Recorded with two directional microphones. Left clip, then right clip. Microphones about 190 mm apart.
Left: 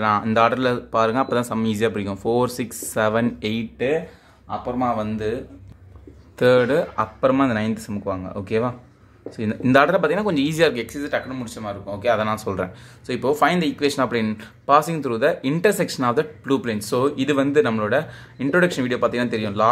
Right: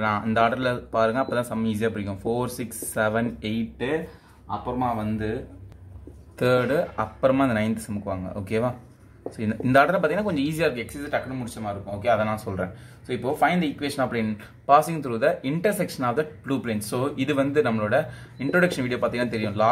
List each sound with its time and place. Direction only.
0.0 s speech: 20° left (ahead or behind)
4.7 s speech: 25° left (ahead or behind)
6.3 s speech: 15° left (ahead or behind)
12.4 s speech: 30° left (ahead or behind)